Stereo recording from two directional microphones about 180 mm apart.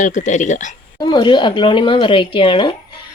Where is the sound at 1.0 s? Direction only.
25° left (ahead or behind).